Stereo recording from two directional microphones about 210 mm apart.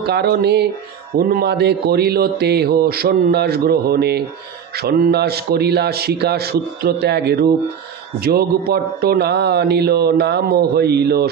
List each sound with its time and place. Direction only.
0.0 s a man's voice: 50° right (ahead or behind)